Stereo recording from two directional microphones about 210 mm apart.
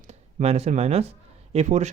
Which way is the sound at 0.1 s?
30° right (ahead or behind).